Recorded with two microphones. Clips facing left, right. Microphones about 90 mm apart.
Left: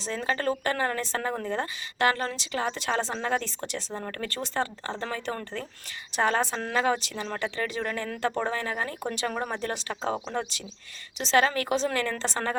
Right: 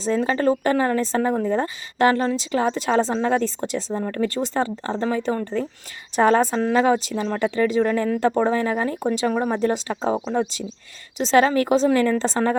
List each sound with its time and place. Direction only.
0.0 s speech: 35° right (ahead or behind)
6.1 s speech: 35° right (ahead or behind)